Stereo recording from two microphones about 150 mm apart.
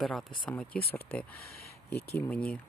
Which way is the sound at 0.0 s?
5° left (ahead or behind).